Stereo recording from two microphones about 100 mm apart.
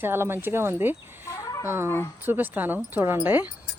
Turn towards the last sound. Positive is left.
turn(degrees=-20)  # may be behind; listen again after turning